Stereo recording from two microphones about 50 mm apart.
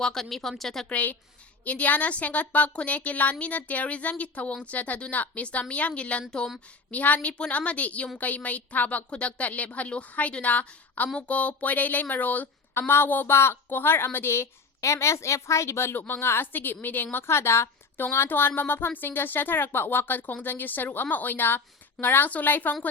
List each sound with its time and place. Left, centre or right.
0.0 s speech: centre
0.9 s a woman's voice: left
12.9 s a woman's voice: left
16.0 s speech: left
16.5 s speech: left
17.2 s a woman's voice: left
18.3 s speech: left